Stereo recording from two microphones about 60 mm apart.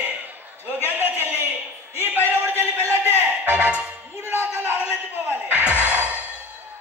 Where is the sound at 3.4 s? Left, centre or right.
Right.